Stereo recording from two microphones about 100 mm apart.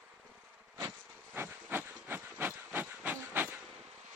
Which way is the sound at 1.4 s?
20° right (ahead or behind).